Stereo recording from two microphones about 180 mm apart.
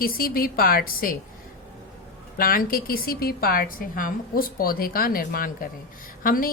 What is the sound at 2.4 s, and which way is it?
A woman's voice, 55° left (ahead or behind).